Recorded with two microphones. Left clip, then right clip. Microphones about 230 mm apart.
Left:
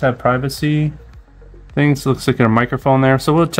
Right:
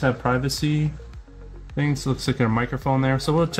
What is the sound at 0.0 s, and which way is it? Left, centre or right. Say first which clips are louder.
Speech: left 7 dB; left.